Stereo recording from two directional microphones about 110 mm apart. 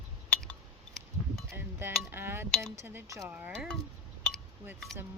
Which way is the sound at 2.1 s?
20° right (ahead or behind).